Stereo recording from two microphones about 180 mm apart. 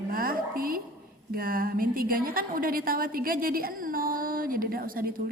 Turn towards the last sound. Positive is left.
turn(degrees=-55)  # may be behind; listen again after turning